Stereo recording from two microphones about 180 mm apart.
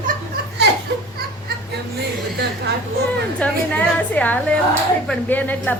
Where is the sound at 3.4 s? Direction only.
5° left (ahead or behind).